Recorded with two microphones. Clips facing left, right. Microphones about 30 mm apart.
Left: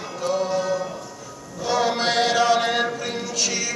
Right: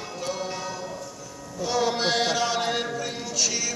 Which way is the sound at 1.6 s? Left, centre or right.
Centre.